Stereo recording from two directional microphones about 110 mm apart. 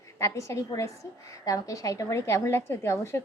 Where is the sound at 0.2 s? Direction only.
30° left (ahead or behind).